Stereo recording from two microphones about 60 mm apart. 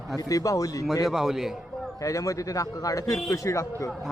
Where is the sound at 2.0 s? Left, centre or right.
Left.